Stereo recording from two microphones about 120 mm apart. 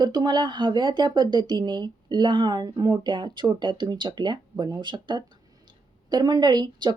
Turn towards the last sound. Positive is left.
turn(degrees=-40)  # may be behind; listen again after turning